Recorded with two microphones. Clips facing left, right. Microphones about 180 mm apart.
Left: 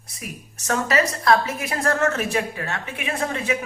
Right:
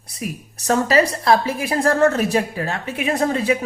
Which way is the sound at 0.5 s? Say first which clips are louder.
Right 5 dB; 35° right (ahead or behind).